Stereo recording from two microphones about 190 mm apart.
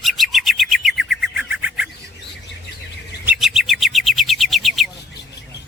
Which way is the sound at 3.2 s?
5° right (ahead or behind).